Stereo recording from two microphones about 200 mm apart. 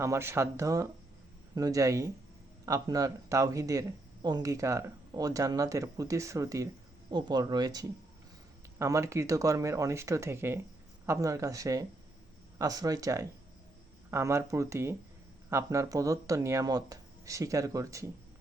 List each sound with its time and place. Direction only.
0.0 s speech: 15° right (ahead or behind)